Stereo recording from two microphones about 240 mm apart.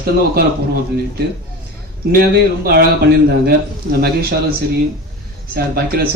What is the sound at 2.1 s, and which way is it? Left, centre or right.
Speech, right.